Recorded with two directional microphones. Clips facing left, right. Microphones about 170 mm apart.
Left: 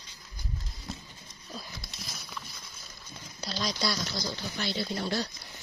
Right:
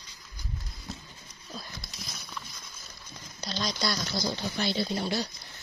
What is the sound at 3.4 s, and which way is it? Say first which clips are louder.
Speech: even; 5° left (ahead or behind).